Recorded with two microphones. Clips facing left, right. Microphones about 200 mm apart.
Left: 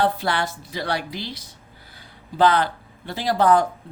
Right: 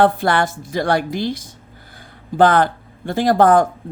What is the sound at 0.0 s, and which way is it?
Speech, 50° right (ahead or behind).